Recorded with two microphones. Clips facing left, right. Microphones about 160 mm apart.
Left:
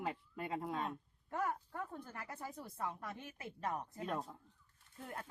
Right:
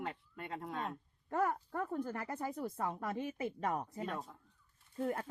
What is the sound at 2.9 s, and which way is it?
Speech, 90° right.